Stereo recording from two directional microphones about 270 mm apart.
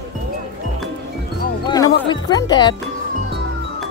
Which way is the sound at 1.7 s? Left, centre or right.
Centre.